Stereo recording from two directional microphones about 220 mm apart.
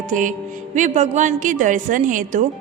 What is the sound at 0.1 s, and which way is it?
Speech, 35° right (ahead or behind).